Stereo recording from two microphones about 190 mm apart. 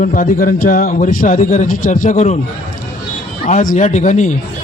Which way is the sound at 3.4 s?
40° left (ahead or behind).